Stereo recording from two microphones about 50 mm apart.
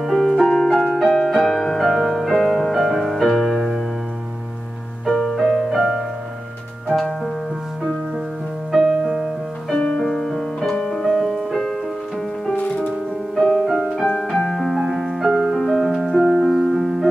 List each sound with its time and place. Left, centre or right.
0.0 s piano: centre
0.5 s music: centre
5.0 s music: centre
6.9 s music: centre
8.8 s music: centre
9.8 s music: centre
12.5 s music: left
13.4 s music: centre
13.7 s piano: centre
14.3 s music: centre